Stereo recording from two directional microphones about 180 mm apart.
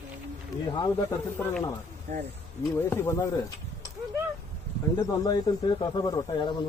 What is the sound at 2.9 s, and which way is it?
Speech, 15° left (ahead or behind).